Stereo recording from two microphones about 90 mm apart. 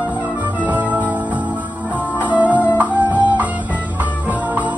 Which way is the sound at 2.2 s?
15° right (ahead or behind).